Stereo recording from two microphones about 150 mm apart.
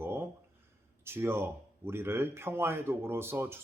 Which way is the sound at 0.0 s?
15° right (ahead or behind).